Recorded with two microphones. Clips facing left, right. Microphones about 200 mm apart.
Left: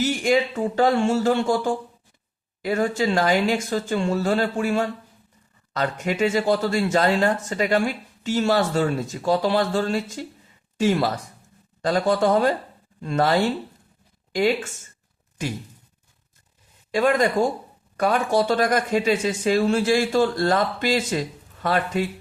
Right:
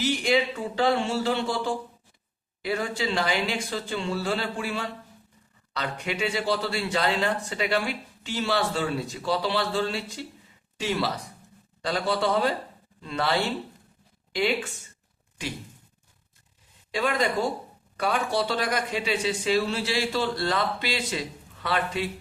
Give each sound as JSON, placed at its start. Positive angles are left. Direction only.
{"t": 0.0, "sound": "speech", "side_deg": 45}
{"t": 16.9, "sound": "speech", "side_deg": 45}